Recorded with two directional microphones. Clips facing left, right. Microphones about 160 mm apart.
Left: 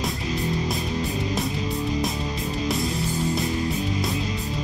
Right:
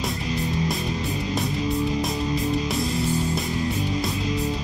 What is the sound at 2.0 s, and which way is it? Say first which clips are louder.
Music: right 2 dB; centre (ahead or behind).